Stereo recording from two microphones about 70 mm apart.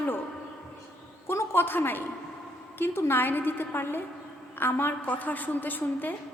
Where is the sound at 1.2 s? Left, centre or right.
Left.